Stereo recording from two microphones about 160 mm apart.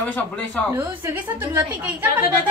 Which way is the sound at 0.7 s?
15° right (ahead or behind).